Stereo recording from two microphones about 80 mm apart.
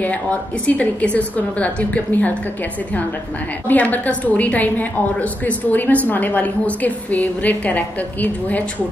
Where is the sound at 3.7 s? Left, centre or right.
Centre.